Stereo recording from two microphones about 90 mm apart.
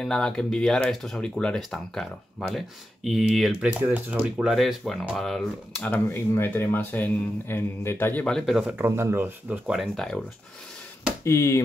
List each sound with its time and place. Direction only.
0.0 s speech: 5° left (ahead or behind)
3.6 s speech: 15° right (ahead or behind)
4.5 s speech: centre (ahead or behind)
5.8 s speech: 20° left (ahead or behind)
8.3 s speech: 5° left (ahead or behind)
8.7 s speech: 30° right (ahead or behind)
9.8 s speech: 5° left (ahead or behind)
11.2 s speech: 35° left (ahead or behind)